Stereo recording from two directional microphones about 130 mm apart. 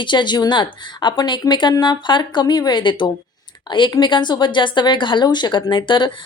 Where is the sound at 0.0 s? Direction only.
35° left (ahead or behind).